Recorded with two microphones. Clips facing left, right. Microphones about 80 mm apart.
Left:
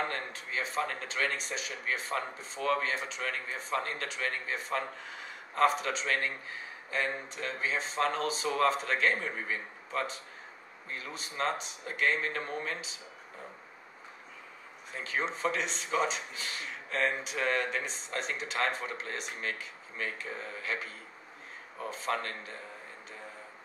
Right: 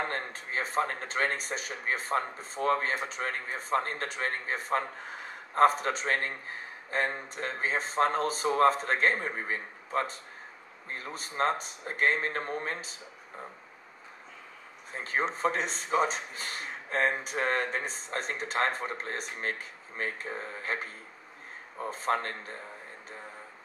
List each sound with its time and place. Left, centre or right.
0.0 s a man's voice: right
14.9 s a man's voice: right